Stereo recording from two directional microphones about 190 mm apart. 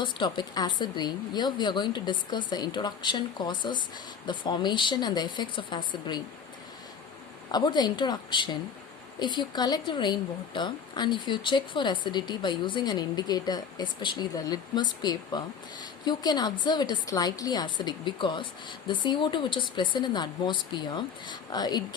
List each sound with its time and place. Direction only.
0.0 s a woman's voice: 25° left (ahead or behind)
7.5 s a woman's voice: 20° left (ahead or behind)